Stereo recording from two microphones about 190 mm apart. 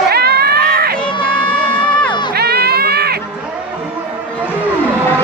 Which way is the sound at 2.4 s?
55° right (ahead or behind).